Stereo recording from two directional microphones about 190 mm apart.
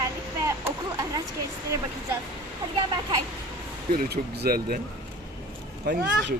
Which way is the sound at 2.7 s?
25° right (ahead or behind).